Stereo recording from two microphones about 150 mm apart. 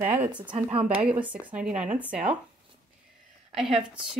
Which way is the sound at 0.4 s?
35° right (ahead or behind).